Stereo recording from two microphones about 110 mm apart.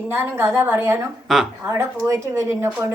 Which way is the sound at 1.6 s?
20° right (ahead or behind).